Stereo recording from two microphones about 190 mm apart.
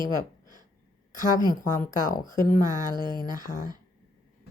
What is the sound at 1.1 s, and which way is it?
Speech, 20° right (ahead or behind).